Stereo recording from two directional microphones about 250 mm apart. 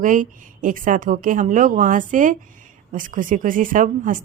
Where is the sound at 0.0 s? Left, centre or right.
Right.